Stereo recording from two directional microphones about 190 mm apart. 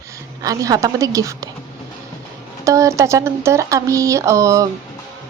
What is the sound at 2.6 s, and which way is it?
A woman's voice, 15° right (ahead or behind).